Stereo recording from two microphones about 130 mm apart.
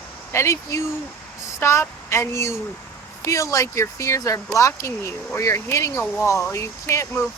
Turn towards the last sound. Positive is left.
turn(degrees=20)  # may be behind; listen again after turning